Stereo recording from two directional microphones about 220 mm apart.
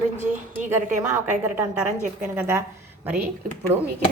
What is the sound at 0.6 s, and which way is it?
Speech, 35° right (ahead or behind).